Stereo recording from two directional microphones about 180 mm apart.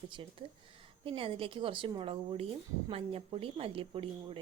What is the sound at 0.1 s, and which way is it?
A woman's voice, 25° right (ahead or behind).